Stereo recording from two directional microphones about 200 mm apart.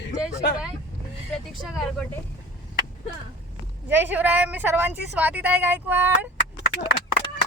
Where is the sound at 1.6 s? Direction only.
Centre (ahead or behind).